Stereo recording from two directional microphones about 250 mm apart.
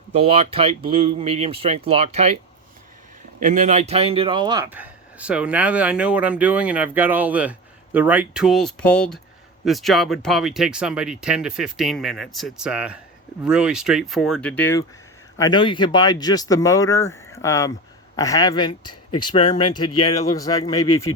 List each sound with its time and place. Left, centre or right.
0.2 s speech: right
3.4 s speech: right; by 20.7 s centre